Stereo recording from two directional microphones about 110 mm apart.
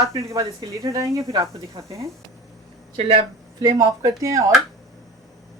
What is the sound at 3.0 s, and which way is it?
Speech, 70° right (ahead or behind).